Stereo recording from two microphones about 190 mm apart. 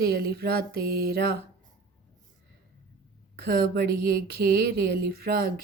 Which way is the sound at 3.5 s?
55° right (ahead or behind).